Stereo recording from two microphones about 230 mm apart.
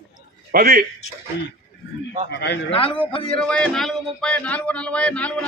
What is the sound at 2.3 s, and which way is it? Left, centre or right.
Speech, left.